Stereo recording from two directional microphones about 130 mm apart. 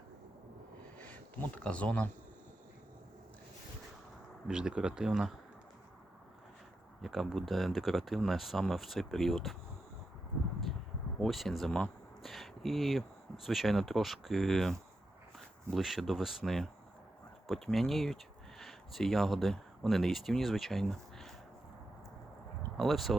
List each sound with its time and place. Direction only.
0.9 s sniff: 15° left (ahead or behind)
1.5 s speech: 10° left (ahead or behind)
4.4 s speech: 5° right (ahead or behind)
7.0 s speech: centre (ahead or behind)
11.2 s speech: centre (ahead or behind)
22.8 s speech: centre (ahead or behind)